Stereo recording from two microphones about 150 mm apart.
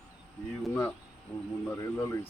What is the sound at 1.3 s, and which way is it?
Speech, 10° left (ahead or behind).